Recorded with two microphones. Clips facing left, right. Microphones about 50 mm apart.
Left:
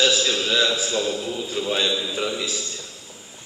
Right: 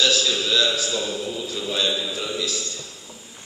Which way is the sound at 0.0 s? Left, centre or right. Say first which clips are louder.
Left 1 dB; left.